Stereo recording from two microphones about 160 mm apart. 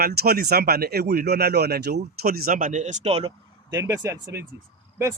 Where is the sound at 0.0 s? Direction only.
75° right (ahead or behind); by 3.3 s 40° right (ahead or behind).